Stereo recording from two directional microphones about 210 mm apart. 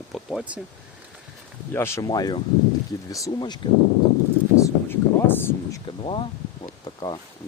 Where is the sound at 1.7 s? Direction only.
15° left (ahead or behind).